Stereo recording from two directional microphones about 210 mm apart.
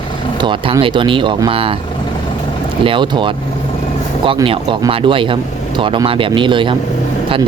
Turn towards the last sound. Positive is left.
turn(degrees=-25)  # may be behind; listen again after turning